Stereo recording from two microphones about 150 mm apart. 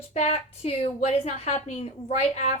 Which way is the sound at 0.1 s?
50° left (ahead or behind).